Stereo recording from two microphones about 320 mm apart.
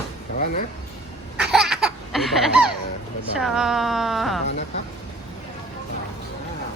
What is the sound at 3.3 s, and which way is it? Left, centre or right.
Speech, centre.